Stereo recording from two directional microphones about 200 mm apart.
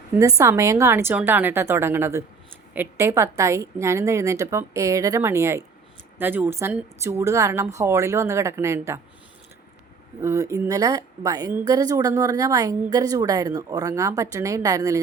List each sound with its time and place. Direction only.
0.2 s a woman's voice: 15° right (ahead or behind)
10.2 s a woman's voice: 15° right (ahead or behind)